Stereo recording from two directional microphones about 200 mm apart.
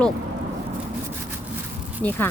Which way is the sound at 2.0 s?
10° left (ahead or behind).